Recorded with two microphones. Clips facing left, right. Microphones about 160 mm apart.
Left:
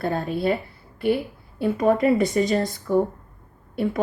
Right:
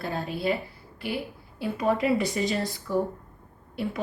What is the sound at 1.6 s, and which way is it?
Speech, 50° left (ahead or behind).